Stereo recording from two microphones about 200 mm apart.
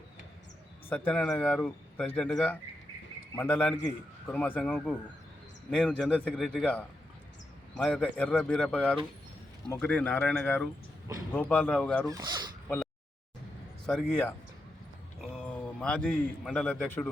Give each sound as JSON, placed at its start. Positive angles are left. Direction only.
{"t": 0.9, "sound": "speech", "side_deg": 5}
{"t": 12.0, "sound": "speech", "side_deg": -20}
{"t": 12.6, "sound": "a sound", "side_deg": 5}
{"t": 13.8, "sound": "speech", "side_deg": 5}
{"t": 15.4, "sound": "a man's voice", "side_deg": 5}